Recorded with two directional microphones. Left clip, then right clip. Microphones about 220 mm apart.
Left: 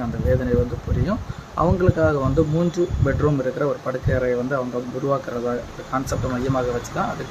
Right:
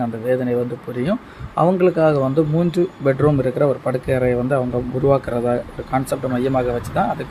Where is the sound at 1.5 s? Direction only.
10° right (ahead or behind).